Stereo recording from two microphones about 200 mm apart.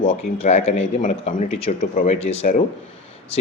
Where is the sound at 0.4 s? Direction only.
30° left (ahead or behind).